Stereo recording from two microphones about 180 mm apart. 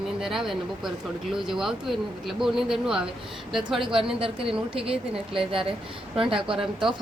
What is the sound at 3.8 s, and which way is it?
A woman's voice, 30° right (ahead or behind).